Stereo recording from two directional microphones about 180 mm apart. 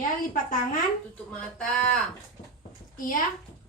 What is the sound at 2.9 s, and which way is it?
Speech, 50° left (ahead or behind).